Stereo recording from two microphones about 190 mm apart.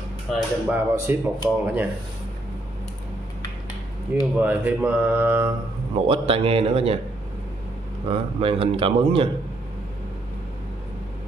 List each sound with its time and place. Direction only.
0.7 s speech: 15° right (ahead or behind)
4.1 s speech: 10° right (ahead or behind)
6.0 s speech: 30° right (ahead or behind)
8.1 s a man's voice: 30° right (ahead or behind)